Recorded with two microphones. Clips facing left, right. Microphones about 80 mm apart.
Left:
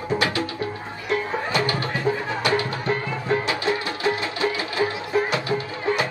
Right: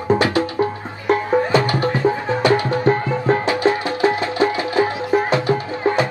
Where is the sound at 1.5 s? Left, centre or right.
Right.